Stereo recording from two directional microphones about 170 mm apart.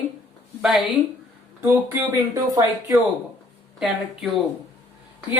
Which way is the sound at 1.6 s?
15° right (ahead or behind).